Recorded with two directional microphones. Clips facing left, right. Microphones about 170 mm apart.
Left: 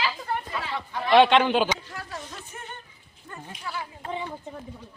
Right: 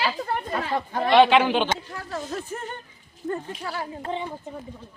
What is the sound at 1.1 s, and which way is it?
Speech, 5° right (ahead or behind).